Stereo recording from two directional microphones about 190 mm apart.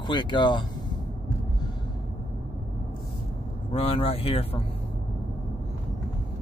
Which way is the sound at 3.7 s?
30° left (ahead or behind).